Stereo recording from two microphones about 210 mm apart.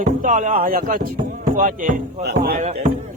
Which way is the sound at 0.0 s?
35° right (ahead or behind).